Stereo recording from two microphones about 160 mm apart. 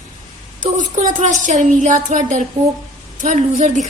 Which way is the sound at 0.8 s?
50° right (ahead or behind).